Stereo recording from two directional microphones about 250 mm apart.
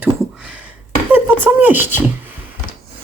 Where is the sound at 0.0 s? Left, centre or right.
Centre.